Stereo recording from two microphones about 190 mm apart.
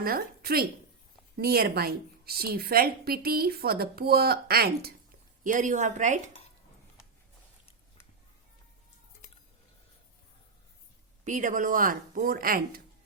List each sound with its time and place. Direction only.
0.0 s a woman's voice: 50° right (ahead or behind)
5.4 s speech: 45° right (ahead or behind)
11.3 s a woman's voice: 40° right (ahead or behind)